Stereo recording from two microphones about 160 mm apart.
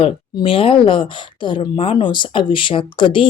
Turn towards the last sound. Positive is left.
turn(degrees=30)  # may be behind; listen again after turning